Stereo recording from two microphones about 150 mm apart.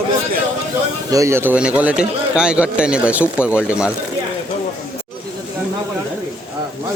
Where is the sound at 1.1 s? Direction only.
20° right (ahead or behind).